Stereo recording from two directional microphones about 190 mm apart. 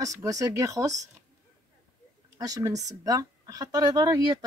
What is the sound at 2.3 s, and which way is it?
Speech, 20° right (ahead or behind).